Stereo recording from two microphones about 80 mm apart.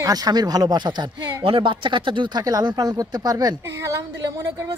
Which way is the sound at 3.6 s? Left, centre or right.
Right.